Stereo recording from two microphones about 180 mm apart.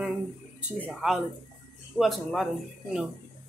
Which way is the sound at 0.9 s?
Centre (ahead or behind).